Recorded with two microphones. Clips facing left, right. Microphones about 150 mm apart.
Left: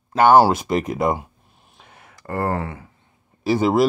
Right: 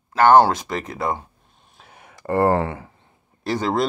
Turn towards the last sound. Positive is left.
turn(degrees=5)  # may be behind; listen again after turning